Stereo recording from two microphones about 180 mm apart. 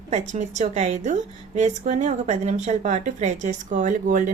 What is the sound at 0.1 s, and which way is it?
A woman's voice, 40° right (ahead or behind).